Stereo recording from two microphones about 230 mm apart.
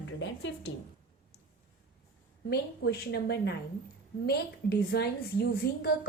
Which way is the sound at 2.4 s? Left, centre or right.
Left.